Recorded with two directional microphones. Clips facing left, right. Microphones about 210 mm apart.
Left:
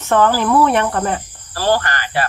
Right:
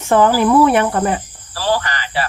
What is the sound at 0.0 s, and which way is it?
Cricket, 10° right (ahead or behind).